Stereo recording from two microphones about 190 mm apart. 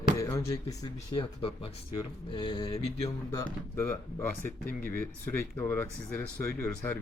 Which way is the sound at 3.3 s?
15° left (ahead or behind).